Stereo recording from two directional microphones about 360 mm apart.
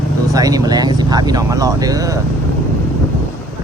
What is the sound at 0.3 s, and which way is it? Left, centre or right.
Speech, centre.